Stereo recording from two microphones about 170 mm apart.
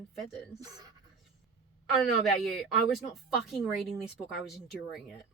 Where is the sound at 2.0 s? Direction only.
Centre (ahead or behind).